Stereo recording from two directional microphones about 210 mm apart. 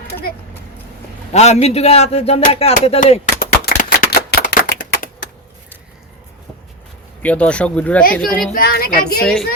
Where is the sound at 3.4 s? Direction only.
45° left (ahead or behind).